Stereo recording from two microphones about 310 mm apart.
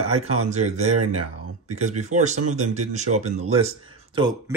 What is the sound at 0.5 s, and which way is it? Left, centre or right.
Speech, right.